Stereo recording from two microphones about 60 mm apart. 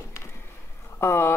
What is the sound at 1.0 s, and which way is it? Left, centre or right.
Speech, left.